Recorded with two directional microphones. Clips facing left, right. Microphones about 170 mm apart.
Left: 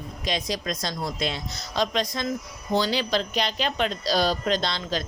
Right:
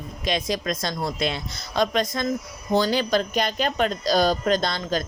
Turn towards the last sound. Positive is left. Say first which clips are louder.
# right 3 dB
turn(degrees=-45)  # may be behind; listen again after turning